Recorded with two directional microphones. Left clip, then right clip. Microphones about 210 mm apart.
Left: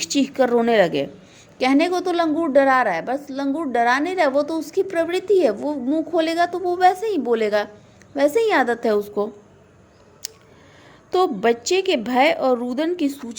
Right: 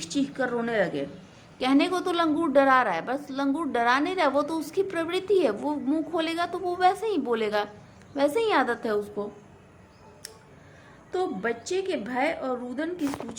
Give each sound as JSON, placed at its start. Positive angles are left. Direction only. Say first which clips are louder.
{"t": 0.0, "sound": "a woman's voice", "louder": "left 9 dB", "side_deg": 35}
{"t": 11.1, "sound": "a woman's voice", "louder": "left 10 dB", "side_deg": 35}